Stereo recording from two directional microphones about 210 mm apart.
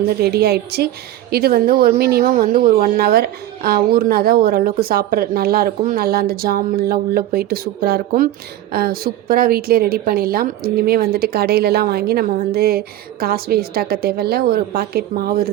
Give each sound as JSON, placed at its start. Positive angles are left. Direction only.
{"t": 0.2, "sound": "speech", "side_deg": -50}